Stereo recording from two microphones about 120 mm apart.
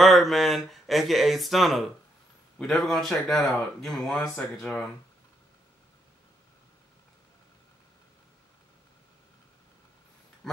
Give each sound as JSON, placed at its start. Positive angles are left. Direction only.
{"t": 0.0, "sound": "speech", "side_deg": 0}
{"t": 10.4, "sound": "speech", "side_deg": 0}